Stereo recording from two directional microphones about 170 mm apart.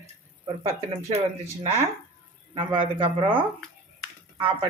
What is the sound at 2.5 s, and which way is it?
Speech, 30° right (ahead or behind).